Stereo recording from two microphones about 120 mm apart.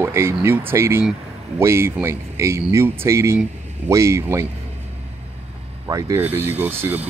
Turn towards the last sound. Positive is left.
turn(degrees=-15)  # may be behind; listen again after turning